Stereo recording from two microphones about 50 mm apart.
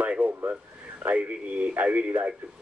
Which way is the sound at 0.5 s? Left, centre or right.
Right.